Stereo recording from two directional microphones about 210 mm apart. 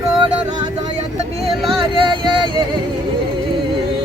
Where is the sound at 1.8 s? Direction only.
25° right (ahead or behind).